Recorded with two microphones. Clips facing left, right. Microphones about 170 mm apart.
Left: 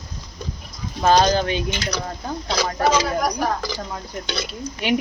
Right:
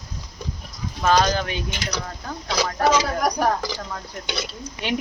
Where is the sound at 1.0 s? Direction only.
30° left (ahead or behind).